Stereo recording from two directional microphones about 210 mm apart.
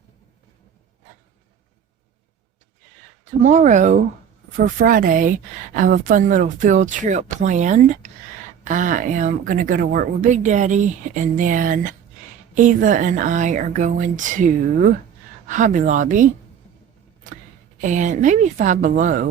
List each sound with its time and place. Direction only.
3.4 s a woman's voice: 35° right (ahead or behind)
17.7 s a woman's voice: 35° right (ahead or behind)